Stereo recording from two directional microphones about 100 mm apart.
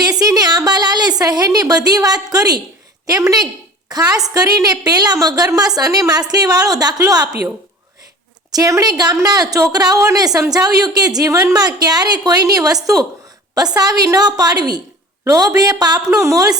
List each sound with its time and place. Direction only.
0.2 s a woman's voice: 40° right (ahead or behind)
8.5 s a woman's voice: 35° right (ahead or behind)